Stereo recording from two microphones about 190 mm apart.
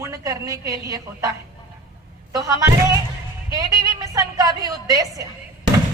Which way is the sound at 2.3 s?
20° right (ahead or behind).